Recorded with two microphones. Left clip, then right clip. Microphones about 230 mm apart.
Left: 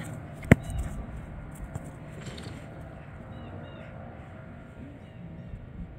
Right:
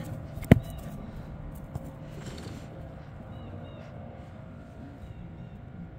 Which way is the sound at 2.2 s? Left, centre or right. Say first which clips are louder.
Left 1 dB; right.